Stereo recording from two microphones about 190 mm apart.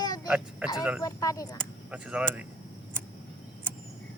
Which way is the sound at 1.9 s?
5° right (ahead or behind).